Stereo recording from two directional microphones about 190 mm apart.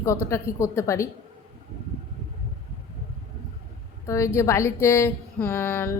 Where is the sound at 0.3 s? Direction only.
15° left (ahead or behind).